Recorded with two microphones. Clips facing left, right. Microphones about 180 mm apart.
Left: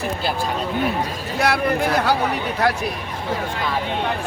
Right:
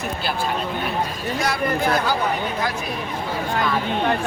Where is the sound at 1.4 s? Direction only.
65° left (ahead or behind).